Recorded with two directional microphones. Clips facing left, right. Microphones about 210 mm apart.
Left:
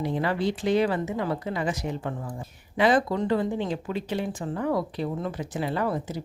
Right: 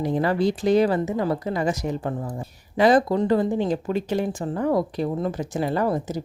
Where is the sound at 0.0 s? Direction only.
40° right (ahead or behind).